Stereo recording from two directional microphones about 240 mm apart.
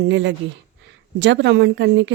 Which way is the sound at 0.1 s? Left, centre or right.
Right.